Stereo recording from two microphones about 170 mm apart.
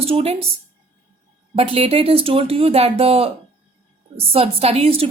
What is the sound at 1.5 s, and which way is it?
A woman's voice, 35° right (ahead or behind).